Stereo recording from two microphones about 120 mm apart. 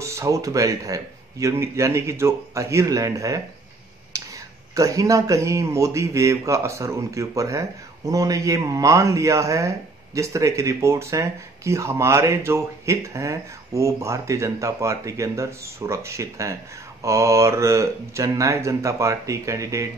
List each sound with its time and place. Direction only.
0.0 s speech: 25° right (ahead or behind)
4.1 s a sound: 30° right (ahead or behind)
4.7 s speech: 30° right (ahead or behind)